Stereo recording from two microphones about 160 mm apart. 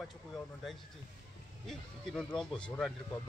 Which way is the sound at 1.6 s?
Centre (ahead or behind).